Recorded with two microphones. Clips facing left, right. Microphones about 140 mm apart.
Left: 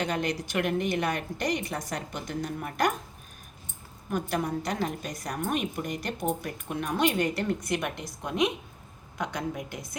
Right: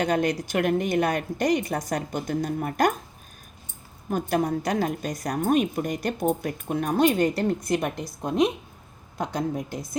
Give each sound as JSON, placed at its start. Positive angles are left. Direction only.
{"t": 0.0, "sound": "a woman's voice", "side_deg": -45}
{"t": 4.1, "sound": "a woman's voice", "side_deg": -40}